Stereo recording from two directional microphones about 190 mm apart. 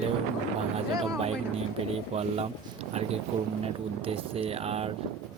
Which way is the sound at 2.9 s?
30° right (ahead or behind).